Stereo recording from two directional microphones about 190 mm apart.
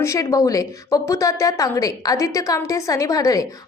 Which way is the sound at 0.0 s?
15° left (ahead or behind).